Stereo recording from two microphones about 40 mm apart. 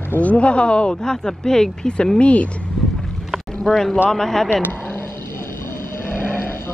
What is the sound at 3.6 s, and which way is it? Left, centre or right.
Speech, centre.